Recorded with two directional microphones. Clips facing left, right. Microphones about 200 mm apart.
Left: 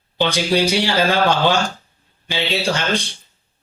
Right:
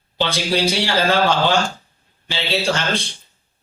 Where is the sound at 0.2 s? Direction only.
15° left (ahead or behind).